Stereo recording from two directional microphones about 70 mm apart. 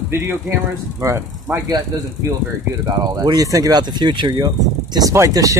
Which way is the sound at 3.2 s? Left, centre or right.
Right.